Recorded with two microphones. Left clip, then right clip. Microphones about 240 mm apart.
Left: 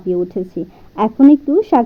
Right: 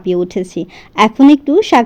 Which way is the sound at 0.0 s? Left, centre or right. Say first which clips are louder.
Right 3 dB; right.